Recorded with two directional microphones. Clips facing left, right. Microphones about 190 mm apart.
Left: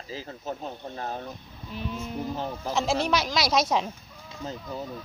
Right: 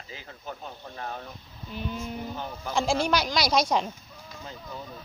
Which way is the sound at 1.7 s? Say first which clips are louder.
Even; centre (ahead or behind).